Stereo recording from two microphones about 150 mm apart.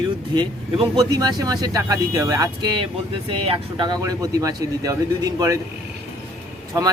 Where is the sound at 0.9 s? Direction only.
25° right (ahead or behind).